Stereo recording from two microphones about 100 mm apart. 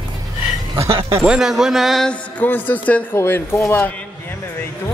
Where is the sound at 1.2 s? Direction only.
5° right (ahead or behind).